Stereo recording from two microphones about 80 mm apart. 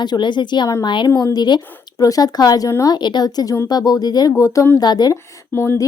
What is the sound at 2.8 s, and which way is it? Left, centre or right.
A woman's voice, left.